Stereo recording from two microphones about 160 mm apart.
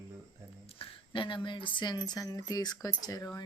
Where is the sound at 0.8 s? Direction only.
30° left (ahead or behind).